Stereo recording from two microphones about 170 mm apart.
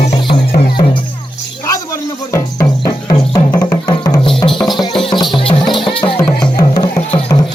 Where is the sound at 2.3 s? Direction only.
25° left (ahead or behind).